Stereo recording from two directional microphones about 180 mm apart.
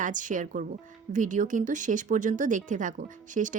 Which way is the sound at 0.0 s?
45° right (ahead or behind).